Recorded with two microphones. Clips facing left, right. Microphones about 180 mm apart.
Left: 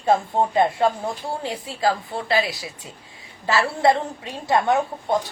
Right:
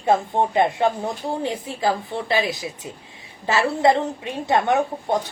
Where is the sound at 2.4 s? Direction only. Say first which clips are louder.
Right 4 dB; 20° right (ahead or behind).